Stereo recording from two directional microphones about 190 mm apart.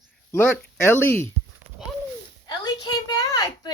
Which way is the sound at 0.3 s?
10° left (ahead or behind).